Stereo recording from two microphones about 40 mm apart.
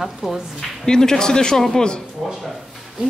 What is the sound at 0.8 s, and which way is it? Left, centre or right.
A man's voice, centre.